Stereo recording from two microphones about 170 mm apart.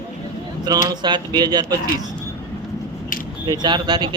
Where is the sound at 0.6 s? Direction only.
25° right (ahead or behind).